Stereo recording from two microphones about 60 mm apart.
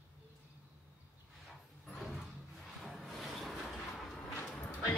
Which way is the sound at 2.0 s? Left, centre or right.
Centre.